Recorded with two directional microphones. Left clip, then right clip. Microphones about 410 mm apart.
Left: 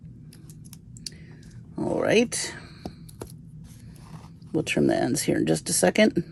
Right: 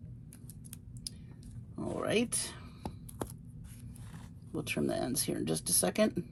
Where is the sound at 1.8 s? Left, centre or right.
Centre.